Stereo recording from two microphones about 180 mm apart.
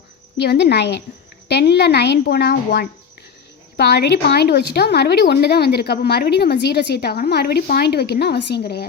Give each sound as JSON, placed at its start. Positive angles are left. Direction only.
{"t": 0.3, "sound": "a woman's voice", "side_deg": 70}
{"t": 3.8, "sound": "speech", "side_deg": 65}